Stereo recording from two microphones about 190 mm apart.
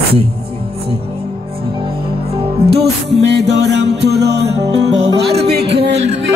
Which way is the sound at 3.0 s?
65° right (ahead or behind).